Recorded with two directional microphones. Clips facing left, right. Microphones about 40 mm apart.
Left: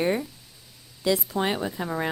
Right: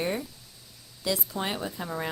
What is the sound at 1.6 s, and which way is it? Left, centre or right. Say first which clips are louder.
Speech: left 4 dB; left.